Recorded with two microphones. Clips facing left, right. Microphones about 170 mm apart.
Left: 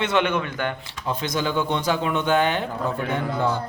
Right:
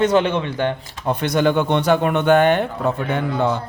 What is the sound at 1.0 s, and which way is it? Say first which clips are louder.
Speech: right 7 dB; 60° right (ahead or behind).